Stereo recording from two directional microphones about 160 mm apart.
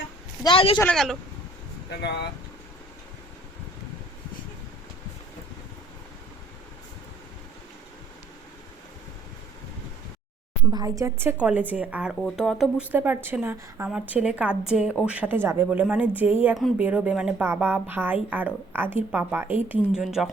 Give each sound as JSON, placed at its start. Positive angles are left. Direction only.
{"t": 0.4, "sound": "a woman's voice", "side_deg": 35}
{"t": 0.8, "sound": "speech", "side_deg": 5}
{"t": 2.0, "sound": "speech", "side_deg": 90}
{"t": 10.7, "sound": "a woman's voice", "side_deg": -25}